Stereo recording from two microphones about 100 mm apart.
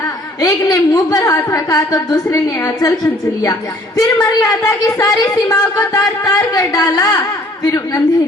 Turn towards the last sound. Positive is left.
turn(degrees=40)  # may be behind; listen again after turning